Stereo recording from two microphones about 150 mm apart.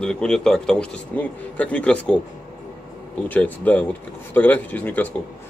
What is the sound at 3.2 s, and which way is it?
Speech, 10° left (ahead or behind).